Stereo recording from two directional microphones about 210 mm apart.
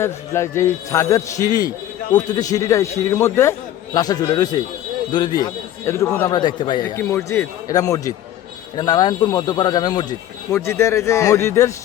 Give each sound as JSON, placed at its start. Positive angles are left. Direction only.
{"t": 0.0, "sound": "speech", "side_deg": 10}